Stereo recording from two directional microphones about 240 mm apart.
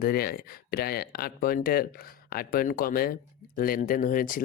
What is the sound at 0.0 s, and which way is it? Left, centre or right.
Speech, left.